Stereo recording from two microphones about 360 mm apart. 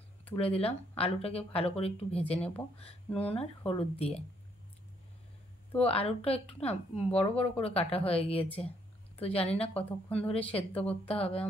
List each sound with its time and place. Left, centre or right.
0.4 s speech: centre
5.8 s speech: centre